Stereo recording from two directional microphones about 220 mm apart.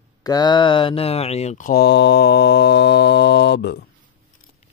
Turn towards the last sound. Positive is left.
turn(degrees=50)  # may be behind; listen again after turning